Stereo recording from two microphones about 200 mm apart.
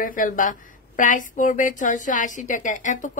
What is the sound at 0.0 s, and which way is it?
Speech, 45° left (ahead or behind).